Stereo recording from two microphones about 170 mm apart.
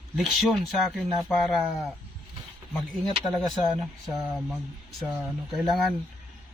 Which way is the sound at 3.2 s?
5° left (ahead or behind).